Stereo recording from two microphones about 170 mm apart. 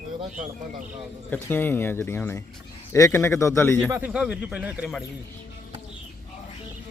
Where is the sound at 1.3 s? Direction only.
10° left (ahead or behind).